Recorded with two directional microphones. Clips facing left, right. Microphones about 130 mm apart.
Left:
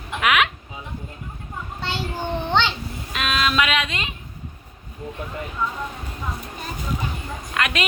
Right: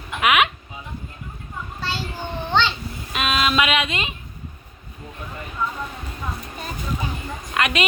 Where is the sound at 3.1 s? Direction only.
5° right (ahead or behind).